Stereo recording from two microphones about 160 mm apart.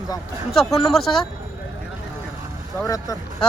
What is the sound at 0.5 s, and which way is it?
Speech, centre (ahead or behind).